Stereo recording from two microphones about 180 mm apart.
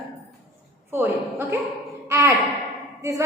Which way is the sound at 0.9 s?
10° right (ahead or behind).